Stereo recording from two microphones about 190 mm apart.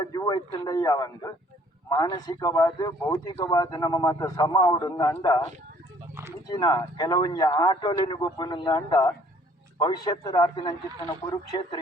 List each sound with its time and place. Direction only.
0.0 s speech: 20° left (ahead or behind)
6.5 s speech: 20° left (ahead or behind)